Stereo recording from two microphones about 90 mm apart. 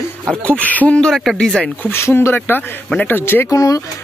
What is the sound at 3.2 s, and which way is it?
Speech, 25° left (ahead or behind).